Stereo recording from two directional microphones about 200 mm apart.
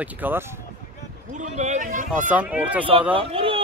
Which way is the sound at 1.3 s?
35° right (ahead or behind).